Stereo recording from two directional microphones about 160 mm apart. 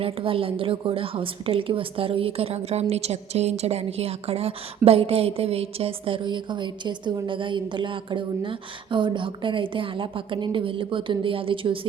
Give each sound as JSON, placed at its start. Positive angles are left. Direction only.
{"t": 0.0, "sound": "a woman's voice", "side_deg": -35}